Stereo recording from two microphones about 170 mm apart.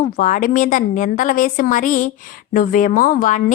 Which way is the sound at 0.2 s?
50° left (ahead or behind).